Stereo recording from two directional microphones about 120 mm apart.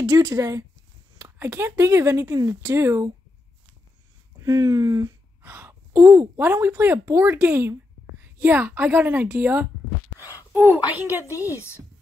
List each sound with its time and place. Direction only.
0.0 s speech: 30° right (ahead or behind)
4.5 s a woman's voice: 30° right (ahead or behind)